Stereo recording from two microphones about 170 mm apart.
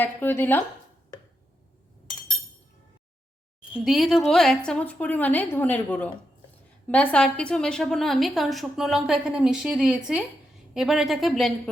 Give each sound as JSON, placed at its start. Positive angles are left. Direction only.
{"t": 0.0, "sound": "a woman's voice", "side_deg": 10}
{"t": 3.8, "sound": "a woman's voice", "side_deg": 0}